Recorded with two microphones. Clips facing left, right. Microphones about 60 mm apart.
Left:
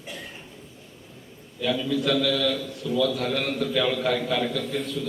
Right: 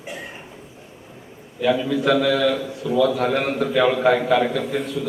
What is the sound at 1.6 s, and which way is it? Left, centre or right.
A man's voice, right.